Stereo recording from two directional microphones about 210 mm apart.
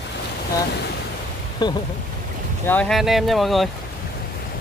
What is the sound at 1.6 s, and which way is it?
Speech, 20° left (ahead or behind).